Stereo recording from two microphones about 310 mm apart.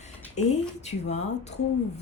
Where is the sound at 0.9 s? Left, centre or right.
Left.